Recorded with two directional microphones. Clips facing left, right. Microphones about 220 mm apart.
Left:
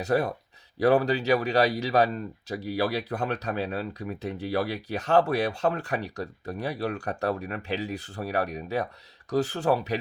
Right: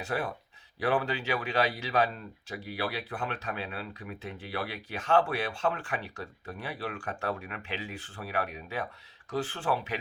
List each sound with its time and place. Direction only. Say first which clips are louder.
0.0 s speech: left 8 dB; 40° left (ahead or behind)